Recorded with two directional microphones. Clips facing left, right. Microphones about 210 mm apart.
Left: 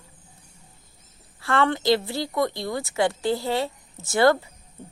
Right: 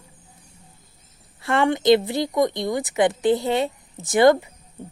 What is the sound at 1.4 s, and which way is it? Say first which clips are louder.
A woman's voice: right 2 dB; 20° right (ahead or behind).